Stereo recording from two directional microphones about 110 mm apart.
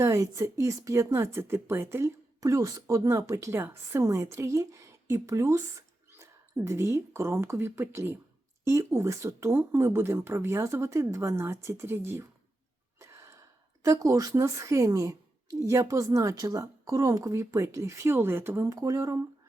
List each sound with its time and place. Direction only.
0.0 s a woman's voice: 25° right (ahead or behind)
13.0 s gasp: 25° right (ahead or behind)
13.8 s speech: 30° right (ahead or behind)